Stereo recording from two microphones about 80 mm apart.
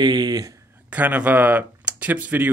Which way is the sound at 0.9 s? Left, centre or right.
Centre.